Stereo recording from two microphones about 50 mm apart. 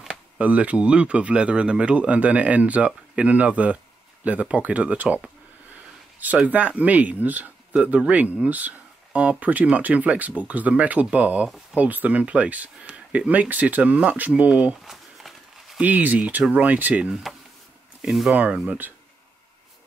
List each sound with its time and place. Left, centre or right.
0.1 s speech: right
14.9 s walk: centre
15.8 s speech: right
17.1 s speech: centre
18.7 s speech: right